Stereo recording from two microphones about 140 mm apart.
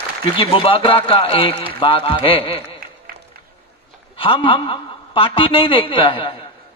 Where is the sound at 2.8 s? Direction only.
90° right.